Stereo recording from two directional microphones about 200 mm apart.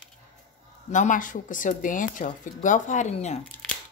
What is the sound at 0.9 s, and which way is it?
Speech, 40° left (ahead or behind).